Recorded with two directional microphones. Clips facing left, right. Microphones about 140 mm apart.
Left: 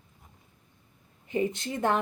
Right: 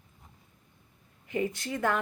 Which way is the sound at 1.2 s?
25° left (ahead or behind).